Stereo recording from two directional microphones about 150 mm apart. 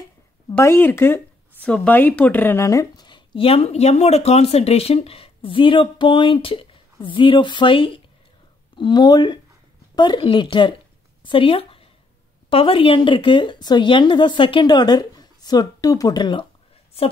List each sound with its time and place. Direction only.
0.5 s speech: 15° left (ahead or behind)